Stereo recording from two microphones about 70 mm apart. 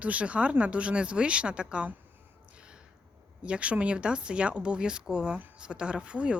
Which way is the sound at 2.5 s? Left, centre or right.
Centre.